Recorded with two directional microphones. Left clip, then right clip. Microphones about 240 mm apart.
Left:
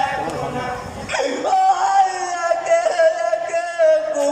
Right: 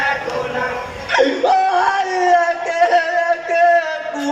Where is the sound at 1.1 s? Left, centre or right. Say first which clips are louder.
Right 4 dB; right.